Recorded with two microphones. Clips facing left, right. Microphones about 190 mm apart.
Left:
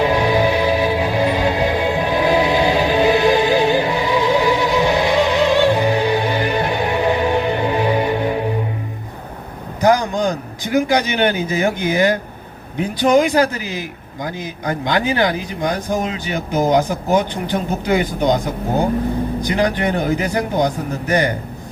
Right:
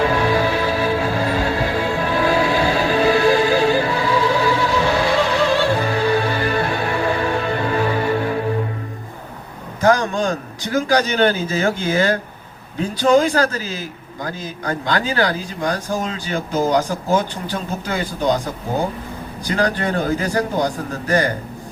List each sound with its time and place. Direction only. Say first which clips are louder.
0.0 s music: left 2 dB; 15° left (ahead or behind)
9.8 s speech: left 1 dB; 20° left (ahead or behind)